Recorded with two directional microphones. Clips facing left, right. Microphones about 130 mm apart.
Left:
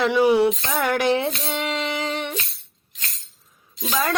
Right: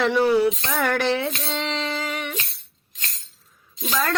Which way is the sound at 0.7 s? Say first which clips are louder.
Left 2 dB; 5° left (ahead or behind).